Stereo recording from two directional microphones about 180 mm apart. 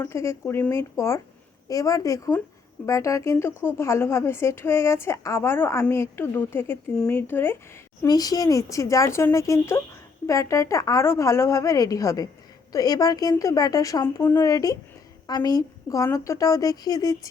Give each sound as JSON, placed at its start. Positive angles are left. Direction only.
{"t": 0.0, "sound": "a woman's voice", "side_deg": 15}